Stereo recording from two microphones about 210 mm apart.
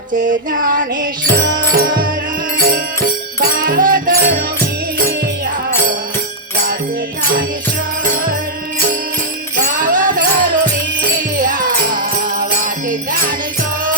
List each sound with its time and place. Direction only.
0.3 s music: 40° right (ahead or behind)
9.6 s music: 40° right (ahead or behind)